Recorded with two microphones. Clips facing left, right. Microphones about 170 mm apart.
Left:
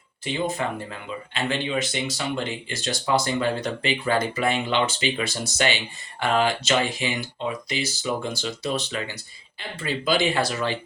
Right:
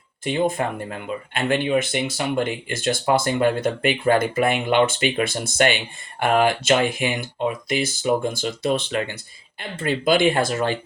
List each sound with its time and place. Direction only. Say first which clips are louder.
0.3 s speech: right 4 dB; 50° right (ahead or behind)